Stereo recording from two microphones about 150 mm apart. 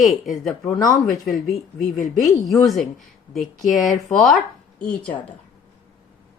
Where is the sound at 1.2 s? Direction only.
Centre (ahead or behind).